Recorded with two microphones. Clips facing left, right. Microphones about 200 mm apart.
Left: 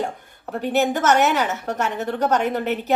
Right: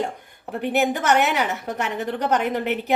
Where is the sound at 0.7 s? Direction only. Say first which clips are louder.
Left 2 dB; 15° right (ahead or behind).